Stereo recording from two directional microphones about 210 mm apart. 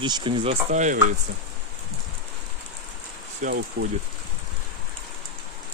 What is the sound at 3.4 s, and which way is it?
Speech, 45° right (ahead or behind).